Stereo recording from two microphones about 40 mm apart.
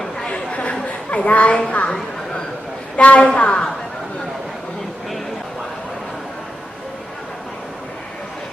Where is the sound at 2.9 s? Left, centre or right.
Left.